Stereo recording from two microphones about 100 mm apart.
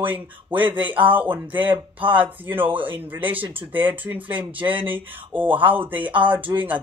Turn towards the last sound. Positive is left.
turn(degrees=-15)  # may be behind; listen again after turning